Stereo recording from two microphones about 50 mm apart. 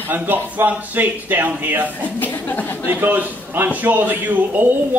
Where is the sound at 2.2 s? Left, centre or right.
Left.